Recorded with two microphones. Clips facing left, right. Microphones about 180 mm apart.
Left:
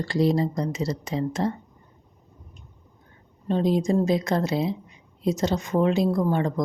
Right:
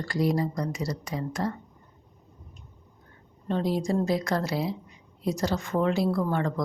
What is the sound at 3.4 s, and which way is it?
A woman's voice, 20° left (ahead or behind).